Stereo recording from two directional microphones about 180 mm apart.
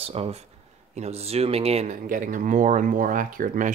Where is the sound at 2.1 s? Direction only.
45° right (ahead or behind).